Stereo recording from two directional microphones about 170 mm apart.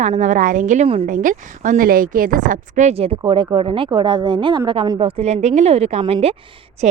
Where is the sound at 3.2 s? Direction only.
25° right (ahead or behind).